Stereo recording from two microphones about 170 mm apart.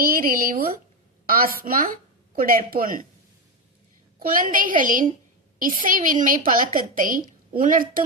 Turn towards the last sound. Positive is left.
turn(degrees=-55)  # may be behind; listen again after turning